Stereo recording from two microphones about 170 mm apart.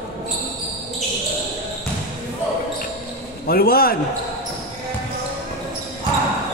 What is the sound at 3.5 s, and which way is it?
Speech, 60° left (ahead or behind).